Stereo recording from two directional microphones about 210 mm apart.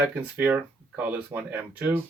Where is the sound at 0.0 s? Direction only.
10° right (ahead or behind).